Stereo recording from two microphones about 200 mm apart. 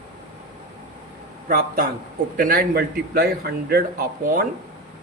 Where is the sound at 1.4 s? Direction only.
45° right (ahead or behind).